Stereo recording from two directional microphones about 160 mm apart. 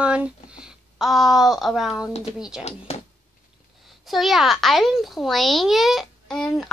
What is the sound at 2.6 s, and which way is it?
Speech, 40° left (ahead or behind).